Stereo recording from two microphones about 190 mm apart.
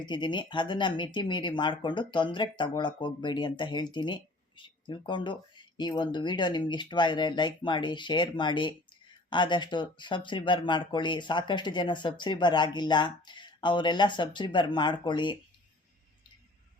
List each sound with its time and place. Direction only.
0.0 s speech: 25° left (ahead or behind)